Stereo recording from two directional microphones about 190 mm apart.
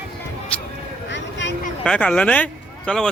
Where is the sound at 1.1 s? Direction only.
70° left (ahead or behind).